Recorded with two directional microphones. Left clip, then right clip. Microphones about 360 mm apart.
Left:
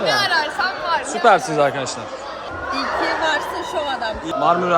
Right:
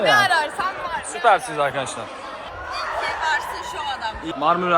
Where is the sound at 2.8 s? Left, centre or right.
Left.